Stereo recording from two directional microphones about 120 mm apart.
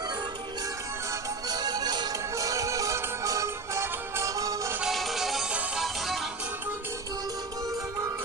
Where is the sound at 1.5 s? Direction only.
35° right (ahead or behind).